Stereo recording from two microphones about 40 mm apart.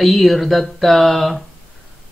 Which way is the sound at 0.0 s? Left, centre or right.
Centre.